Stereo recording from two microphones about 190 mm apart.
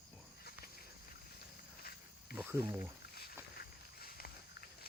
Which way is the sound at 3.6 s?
50° left (ahead or behind).